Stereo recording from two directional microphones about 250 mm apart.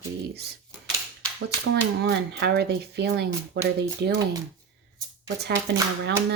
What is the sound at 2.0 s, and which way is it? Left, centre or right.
Speech, right.